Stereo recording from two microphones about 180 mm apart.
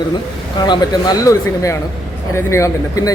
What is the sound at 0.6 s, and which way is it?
A man's voice, 20° left (ahead or behind).